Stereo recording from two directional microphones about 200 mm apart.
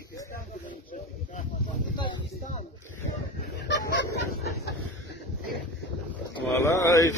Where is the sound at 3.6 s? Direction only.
60° left (ahead or behind).